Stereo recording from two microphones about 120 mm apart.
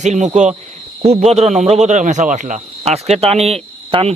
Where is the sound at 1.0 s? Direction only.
60° right (ahead or behind).